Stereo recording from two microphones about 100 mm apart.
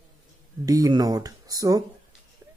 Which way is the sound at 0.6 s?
40° right (ahead or behind).